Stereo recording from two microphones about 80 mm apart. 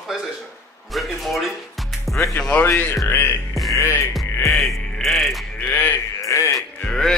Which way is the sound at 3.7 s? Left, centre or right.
Left.